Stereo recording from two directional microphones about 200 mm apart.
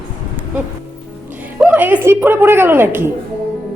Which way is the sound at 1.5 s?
10° right (ahead or behind).